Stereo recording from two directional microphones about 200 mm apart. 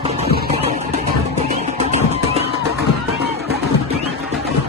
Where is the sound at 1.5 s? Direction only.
35° right (ahead or behind).